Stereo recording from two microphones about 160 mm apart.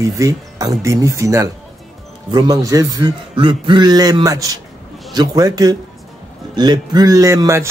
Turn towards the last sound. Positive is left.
turn(degrees=-20)  # may be behind; listen again after turning